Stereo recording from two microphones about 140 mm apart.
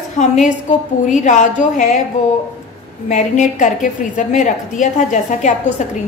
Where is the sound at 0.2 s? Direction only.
60° left (ahead or behind).